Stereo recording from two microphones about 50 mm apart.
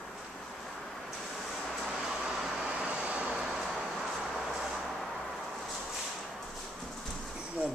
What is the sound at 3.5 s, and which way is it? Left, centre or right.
Vehicle, centre.